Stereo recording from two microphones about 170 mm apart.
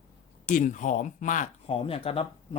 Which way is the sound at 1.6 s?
35° left (ahead or behind).